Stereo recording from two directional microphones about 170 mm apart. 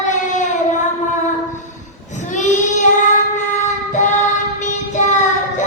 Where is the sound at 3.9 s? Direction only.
45° left (ahead or behind).